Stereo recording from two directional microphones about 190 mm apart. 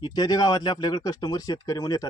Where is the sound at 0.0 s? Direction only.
20° left (ahead or behind).